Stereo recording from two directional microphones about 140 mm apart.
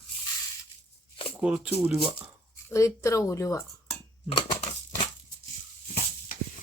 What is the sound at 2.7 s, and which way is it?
Speech, 20° left (ahead or behind).